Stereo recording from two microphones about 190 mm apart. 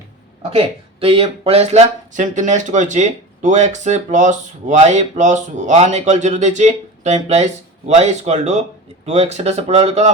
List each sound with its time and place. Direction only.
0.5 s speech: 30° right (ahead or behind)